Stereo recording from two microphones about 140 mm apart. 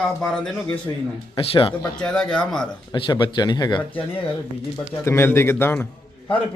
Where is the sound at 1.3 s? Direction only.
40° left (ahead or behind).